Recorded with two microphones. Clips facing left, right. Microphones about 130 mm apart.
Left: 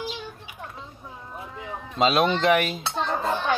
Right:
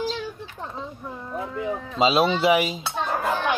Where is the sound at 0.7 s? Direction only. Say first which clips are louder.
Right 7 dB; 90° right.